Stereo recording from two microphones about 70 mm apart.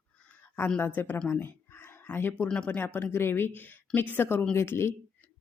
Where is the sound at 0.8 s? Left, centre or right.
Left.